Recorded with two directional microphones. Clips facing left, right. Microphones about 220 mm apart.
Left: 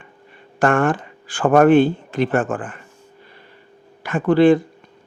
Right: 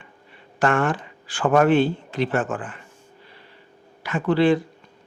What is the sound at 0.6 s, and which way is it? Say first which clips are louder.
Speech: left 4 dB; 50° left (ahead or behind).